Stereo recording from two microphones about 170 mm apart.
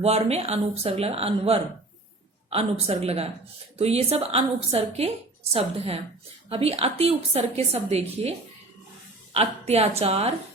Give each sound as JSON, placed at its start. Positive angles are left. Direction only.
{"t": 0.0, "sound": "a woman's voice", "side_deg": -40}